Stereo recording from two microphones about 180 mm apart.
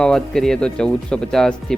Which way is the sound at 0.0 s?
5° left (ahead or behind).